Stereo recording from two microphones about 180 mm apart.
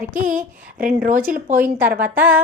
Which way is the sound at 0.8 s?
50° right (ahead or behind).